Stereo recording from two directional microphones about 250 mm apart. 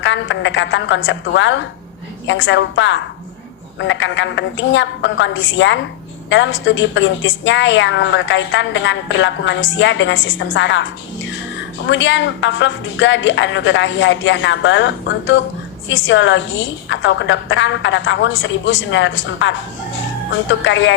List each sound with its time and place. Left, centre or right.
0.0 s a woman's voice: left